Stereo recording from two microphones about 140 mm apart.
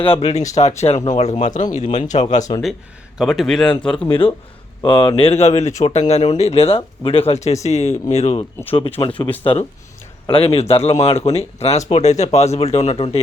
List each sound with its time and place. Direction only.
0.0 s speech: 45° left (ahead or behind)
2.5 s speech: 30° left (ahead or behind)
3.2 s a man's voice: centre (ahead or behind)
4.8 s speech: 35° left (ahead or behind)
8.7 s speech: 40° left (ahead or behind)